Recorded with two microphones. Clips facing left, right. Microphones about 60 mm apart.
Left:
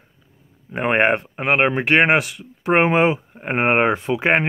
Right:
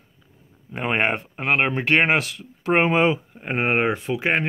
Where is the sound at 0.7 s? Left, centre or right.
Left.